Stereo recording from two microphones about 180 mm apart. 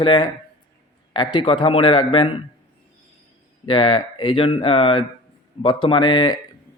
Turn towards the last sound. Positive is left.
turn(degrees=25)  # may be behind; listen again after turning